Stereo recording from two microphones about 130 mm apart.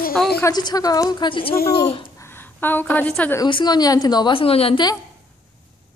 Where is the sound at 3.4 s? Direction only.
35° left (ahead or behind).